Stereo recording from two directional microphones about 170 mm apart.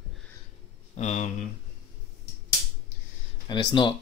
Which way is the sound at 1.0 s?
40° left (ahead or behind).